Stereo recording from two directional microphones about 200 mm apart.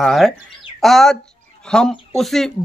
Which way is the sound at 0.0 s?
Centre (ahead or behind).